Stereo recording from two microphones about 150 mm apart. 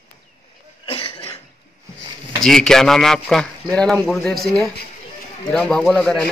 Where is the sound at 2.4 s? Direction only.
5° left (ahead or behind).